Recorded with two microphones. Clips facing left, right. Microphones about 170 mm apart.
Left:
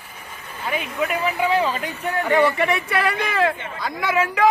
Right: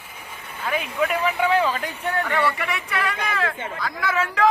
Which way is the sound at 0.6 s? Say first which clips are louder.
Right 1 dB; 10° left (ahead or behind).